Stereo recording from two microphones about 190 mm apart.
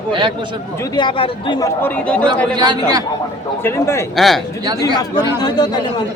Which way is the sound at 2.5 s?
20° right (ahead or behind).